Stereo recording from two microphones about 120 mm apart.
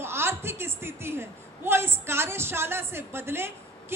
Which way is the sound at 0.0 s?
20° right (ahead or behind).